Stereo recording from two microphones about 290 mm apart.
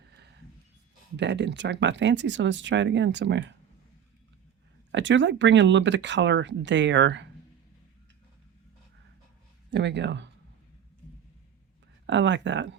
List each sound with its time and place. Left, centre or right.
1.1 s speech: right
4.9 s speech: right
9.6 s speech: right
12.0 s speech: right